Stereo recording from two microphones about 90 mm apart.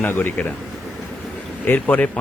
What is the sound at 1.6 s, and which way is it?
Speech, 20° left (ahead or behind).